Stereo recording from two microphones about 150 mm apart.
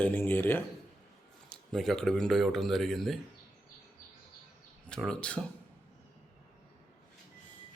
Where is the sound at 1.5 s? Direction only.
Centre (ahead or behind).